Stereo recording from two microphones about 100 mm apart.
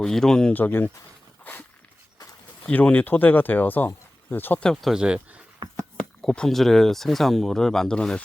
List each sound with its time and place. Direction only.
0.0 s speech: 5° left (ahead or behind)
0.5 s speech: 20° left (ahead or behind)
2.6 s speech: 15° left (ahead or behind)
4.6 s speech: 5° left (ahead or behind)
5.6 s a sound: 40° right (ahead or behind)
6.2 s speech: 5° left (ahead or behind)